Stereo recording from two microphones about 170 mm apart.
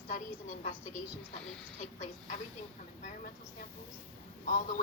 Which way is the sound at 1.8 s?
45° left (ahead or behind).